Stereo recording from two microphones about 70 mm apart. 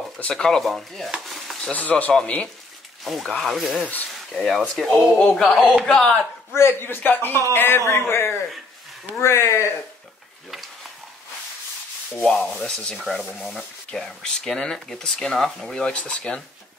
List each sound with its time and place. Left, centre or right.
0.2 s speech: centre
1.2 s stir: centre
1.7 s speech: left
3.0 s speech: centre
6.5 s speech: left
12.2 s speech: centre
12.9 s speech: centre